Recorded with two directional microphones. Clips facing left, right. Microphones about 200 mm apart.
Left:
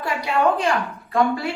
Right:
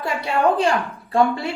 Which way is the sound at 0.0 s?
25° right (ahead or behind).